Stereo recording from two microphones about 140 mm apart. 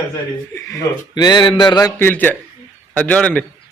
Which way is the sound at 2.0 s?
15° left (ahead or behind).